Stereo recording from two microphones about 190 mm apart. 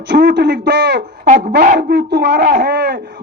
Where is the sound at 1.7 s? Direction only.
60° right (ahead or behind).